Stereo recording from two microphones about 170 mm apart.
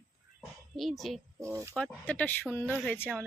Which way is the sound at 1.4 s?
15° right (ahead or behind).